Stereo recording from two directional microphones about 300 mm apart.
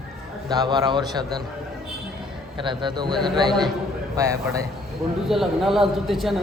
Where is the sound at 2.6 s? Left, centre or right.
Centre.